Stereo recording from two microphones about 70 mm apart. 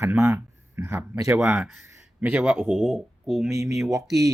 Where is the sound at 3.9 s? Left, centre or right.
Right.